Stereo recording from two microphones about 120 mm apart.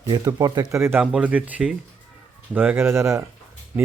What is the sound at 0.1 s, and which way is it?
Speech, 30° right (ahead or behind).